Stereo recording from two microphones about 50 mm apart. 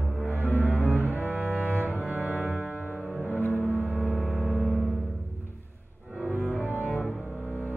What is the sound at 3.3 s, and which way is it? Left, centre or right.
Music, left.